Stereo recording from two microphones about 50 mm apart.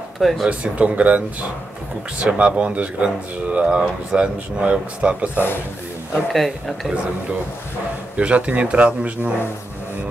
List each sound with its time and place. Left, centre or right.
0.2 s speech: centre
0.5 s speech: right
6.3 s speech: centre
8.2 s speech: right